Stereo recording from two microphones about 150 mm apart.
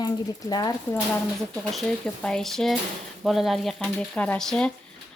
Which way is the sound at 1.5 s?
5° left (ahead or behind).